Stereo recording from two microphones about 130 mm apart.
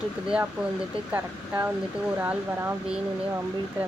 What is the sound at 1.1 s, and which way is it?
Speech, 15° right (ahead or behind).